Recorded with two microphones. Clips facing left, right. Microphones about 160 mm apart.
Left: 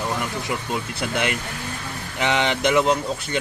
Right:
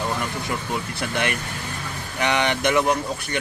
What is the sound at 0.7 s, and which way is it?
Speech, 20° left (ahead or behind).